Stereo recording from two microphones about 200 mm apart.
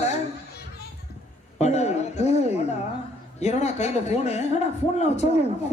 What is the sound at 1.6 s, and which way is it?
A man's voice, 35° left (ahead or behind).